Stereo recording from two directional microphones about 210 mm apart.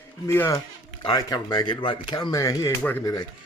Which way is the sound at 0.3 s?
10° left (ahead or behind).